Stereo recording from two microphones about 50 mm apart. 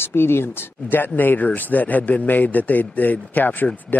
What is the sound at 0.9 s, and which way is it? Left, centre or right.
Speech, left.